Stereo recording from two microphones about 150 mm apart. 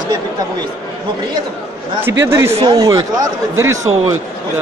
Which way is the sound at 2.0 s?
15° right (ahead or behind).